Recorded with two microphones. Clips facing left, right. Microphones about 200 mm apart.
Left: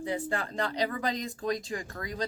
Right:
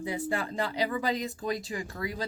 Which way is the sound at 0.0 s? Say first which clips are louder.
Right 1 dB; 10° right (ahead or behind).